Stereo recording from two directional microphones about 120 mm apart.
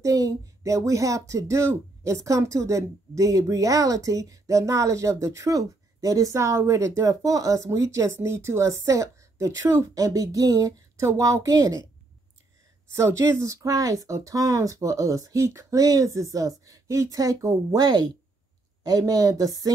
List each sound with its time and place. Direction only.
0.0 s speech: 30° right (ahead or behind)
12.9 s speech: 25° right (ahead or behind)